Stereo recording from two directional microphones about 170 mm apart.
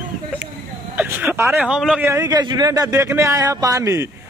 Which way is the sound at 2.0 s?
20° right (ahead or behind).